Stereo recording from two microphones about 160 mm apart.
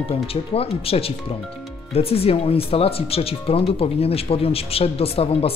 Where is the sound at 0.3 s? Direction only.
35° left (ahead or behind).